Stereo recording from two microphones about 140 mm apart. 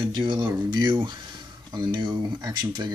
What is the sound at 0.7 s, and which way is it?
Speech, 35° right (ahead or behind).